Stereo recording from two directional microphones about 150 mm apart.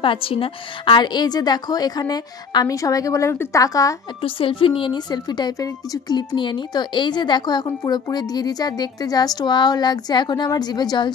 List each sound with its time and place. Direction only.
0.0 s a woman's voice: 35° left (ahead or behind)
4.2 s a woman's voice: 35° left (ahead or behind)